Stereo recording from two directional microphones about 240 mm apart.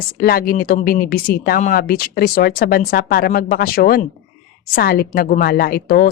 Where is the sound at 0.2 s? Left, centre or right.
Left.